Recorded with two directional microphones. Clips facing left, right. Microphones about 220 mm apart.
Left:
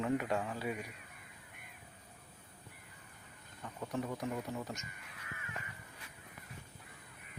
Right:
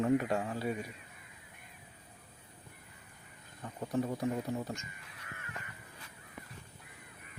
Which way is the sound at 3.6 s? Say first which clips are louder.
Right 5 dB; 30° right (ahead or behind).